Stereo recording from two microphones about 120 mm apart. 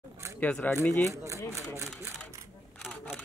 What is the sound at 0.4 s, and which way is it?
Speech, 15° left (ahead or behind).